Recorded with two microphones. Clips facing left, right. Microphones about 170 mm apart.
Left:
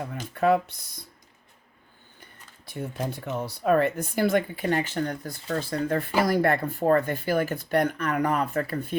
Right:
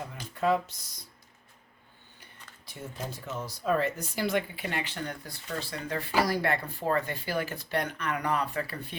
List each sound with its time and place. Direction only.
0.3 s speech: 60° left (ahead or behind)
2.6 s speech: 60° left (ahead or behind)